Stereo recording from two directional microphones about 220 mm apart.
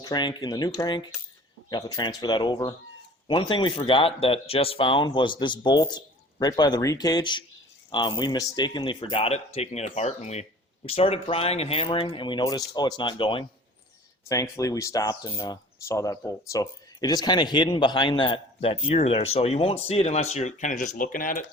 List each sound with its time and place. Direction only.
0.0 s speech: 20° left (ahead or behind); by 21.4 s 40° left (ahead or behind)